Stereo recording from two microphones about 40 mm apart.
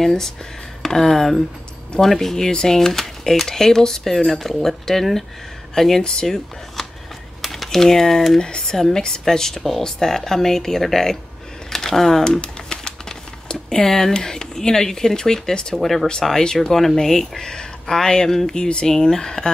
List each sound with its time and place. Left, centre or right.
0.0 s speech: centre
8.4 s speech: centre
12.4 s typewriter: centre
13.5 s speech: centre
15.8 s speech: centre